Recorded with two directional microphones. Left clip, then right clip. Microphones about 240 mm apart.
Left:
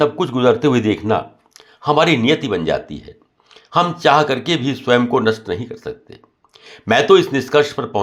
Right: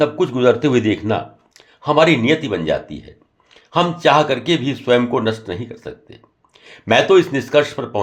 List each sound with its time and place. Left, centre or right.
0.0 s speech: centre